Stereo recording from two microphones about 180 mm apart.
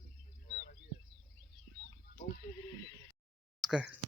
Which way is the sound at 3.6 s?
5° right (ahead or behind).